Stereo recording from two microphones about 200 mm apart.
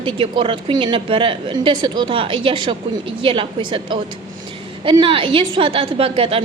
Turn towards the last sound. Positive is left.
turn(degrees=-30)  # may be behind; listen again after turning